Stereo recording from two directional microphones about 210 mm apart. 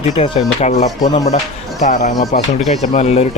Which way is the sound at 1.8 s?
35° left (ahead or behind).